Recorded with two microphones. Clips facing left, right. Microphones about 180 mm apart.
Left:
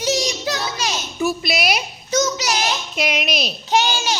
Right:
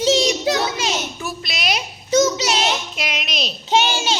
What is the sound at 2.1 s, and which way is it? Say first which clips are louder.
Speech: right 4 dB; 25° right (ahead or behind).